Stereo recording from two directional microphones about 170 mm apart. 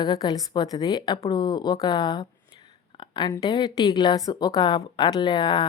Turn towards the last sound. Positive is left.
turn(degrees=25)  # may be behind; listen again after turning